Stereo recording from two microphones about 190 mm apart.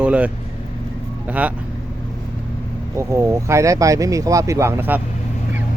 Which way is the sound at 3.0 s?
15° right (ahead or behind).